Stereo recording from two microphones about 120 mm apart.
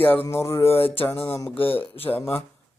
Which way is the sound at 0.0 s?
15° left (ahead or behind).